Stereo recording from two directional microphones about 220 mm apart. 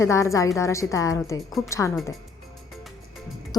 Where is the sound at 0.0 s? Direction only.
15° left (ahead or behind).